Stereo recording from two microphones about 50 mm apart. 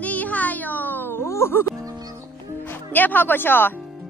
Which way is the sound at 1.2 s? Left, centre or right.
Left.